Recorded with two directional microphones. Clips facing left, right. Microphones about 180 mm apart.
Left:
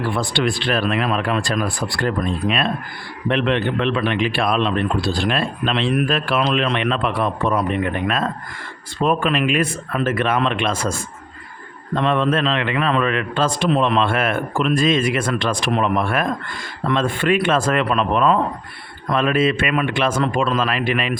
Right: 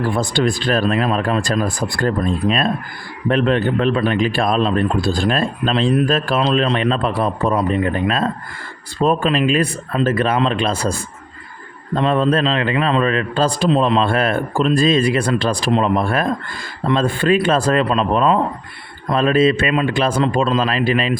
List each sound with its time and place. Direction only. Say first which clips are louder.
0.0 s speech: right 3 dB; 45° right (ahead or behind)